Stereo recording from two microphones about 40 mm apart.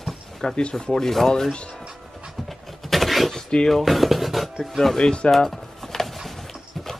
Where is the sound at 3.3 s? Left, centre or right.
Centre.